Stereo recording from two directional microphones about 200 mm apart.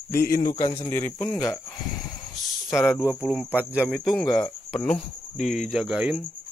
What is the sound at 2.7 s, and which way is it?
Speech, 15° left (ahead or behind).